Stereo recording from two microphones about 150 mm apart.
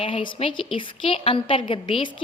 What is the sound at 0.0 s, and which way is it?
A woman's voice, 35° left (ahead or behind).